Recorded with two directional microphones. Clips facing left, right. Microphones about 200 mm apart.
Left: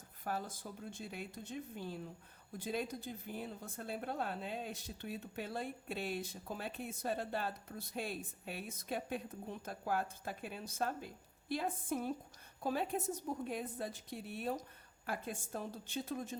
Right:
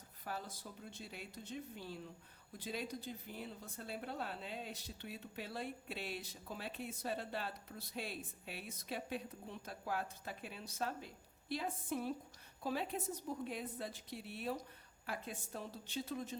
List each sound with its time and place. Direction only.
0.3 s a woman's voice: 50° left (ahead or behind)